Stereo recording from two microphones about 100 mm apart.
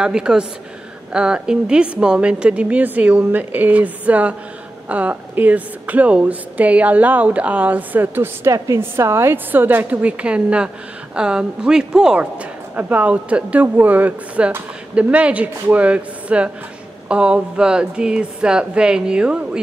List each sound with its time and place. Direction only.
0.0 s a woman's voice: 10° right (ahead or behind)
8.5 s a woman's voice: 30° right (ahead or behind); by 19.6 s 10° right (ahead or behind)